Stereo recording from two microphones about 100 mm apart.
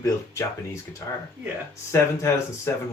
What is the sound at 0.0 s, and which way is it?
Speech, 30° left (ahead or behind).